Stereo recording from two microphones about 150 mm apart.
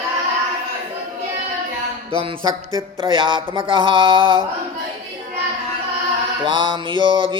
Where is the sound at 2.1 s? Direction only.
35° right (ahead or behind).